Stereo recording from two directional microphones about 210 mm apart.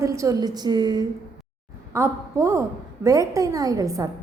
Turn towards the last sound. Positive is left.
turn(degrees=-15)  # may be behind; listen again after turning